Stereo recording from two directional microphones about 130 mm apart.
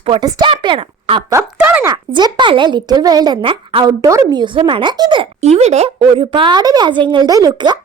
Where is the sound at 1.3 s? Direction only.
15° right (ahead or behind).